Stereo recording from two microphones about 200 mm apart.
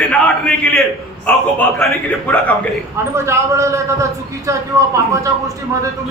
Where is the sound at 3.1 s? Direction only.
15° right (ahead or behind).